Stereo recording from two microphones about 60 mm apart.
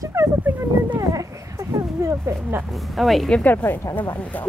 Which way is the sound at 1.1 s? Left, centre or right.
Right.